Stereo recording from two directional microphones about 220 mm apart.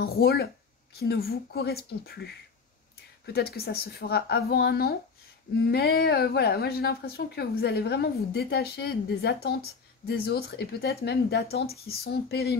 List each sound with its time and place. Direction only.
0.0 s speech: 45° left (ahead or behind)
3.3 s speech: 45° left (ahead or behind)